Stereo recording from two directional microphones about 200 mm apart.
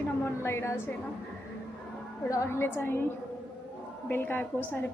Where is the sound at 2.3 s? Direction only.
15° left (ahead or behind).